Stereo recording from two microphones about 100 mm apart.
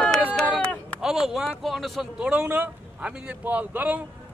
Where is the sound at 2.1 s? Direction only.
15° right (ahead or behind).